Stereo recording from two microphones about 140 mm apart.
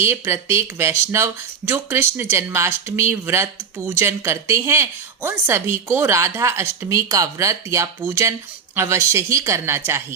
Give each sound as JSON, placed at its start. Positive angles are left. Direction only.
{"t": 0.0, "sound": "speech", "side_deg": -15}